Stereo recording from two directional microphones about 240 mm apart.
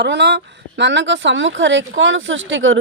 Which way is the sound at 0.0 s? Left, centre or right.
Right.